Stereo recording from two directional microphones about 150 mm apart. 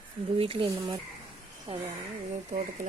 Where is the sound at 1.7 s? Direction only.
35° right (ahead or behind).